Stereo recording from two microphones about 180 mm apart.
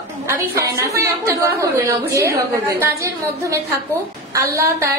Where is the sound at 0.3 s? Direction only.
15° right (ahead or behind).